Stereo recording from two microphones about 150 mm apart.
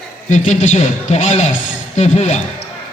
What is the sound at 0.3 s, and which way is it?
A man's voice, 50° left (ahead or behind).